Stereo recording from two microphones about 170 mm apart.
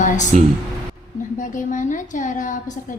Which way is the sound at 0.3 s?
45° right (ahead or behind).